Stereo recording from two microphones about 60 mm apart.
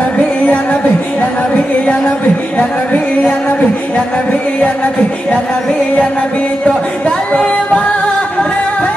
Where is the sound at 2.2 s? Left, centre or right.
Left.